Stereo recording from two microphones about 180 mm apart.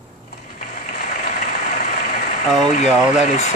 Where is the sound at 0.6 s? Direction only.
50° left (ahead or behind).